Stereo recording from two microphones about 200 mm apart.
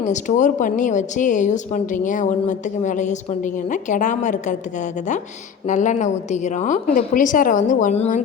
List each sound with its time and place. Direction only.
0.0 s a woman's voice: 35° left (ahead or behind)
5.6 s a woman's voice: 40° left (ahead or behind)